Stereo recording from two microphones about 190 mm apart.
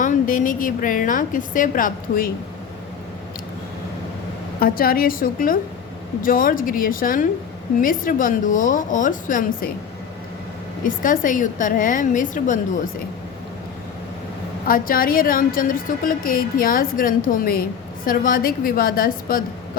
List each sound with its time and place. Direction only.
0.0 s a woman's voice: 45° left (ahead or behind)
4.6 s a woman's voice: 50° left (ahead or behind)
10.8 s a woman's voice: 45° left (ahead or behind)
14.7 s a woman's voice: 50° left (ahead or behind)